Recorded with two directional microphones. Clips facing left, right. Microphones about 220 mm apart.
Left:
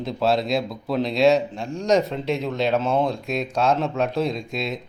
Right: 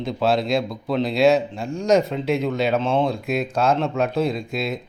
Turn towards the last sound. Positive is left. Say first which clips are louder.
# right 2 dB
turn(degrees=0)  # may be behind; listen again after turning